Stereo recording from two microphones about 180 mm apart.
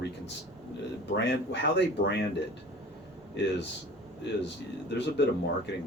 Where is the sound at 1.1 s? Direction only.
75° left (ahead or behind).